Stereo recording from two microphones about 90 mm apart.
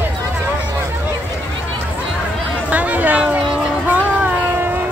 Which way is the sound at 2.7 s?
15° right (ahead or behind).